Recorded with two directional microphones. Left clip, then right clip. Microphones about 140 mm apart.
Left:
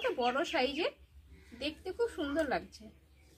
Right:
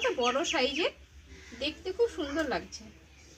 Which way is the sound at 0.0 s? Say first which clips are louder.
Right 4 dB; 20° left (ahead or behind).